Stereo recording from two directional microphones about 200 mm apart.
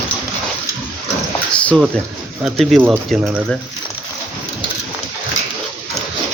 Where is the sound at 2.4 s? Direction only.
Centre (ahead or behind).